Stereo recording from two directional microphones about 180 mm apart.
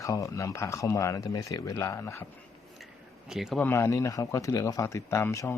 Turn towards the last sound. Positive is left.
turn(degrees=15)  # may be behind; listen again after turning